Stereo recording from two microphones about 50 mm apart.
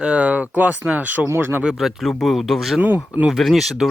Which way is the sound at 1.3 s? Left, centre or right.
Right.